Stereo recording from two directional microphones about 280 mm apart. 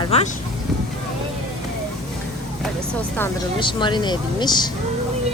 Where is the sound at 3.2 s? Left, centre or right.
Centre.